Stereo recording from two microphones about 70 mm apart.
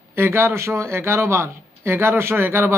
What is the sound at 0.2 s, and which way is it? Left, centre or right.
A man's voice, right.